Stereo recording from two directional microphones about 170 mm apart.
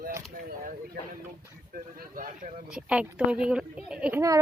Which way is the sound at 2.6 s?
5° right (ahead or behind).